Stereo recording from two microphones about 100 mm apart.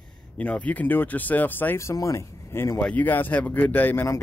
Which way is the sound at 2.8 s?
15° left (ahead or behind).